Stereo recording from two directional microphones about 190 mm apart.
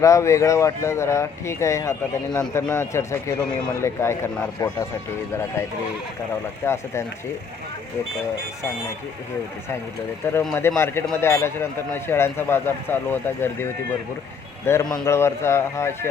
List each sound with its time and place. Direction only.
0.0 s a man's voice: 15° left (ahead or behind)
10.2 s a man's voice: 15° left (ahead or behind)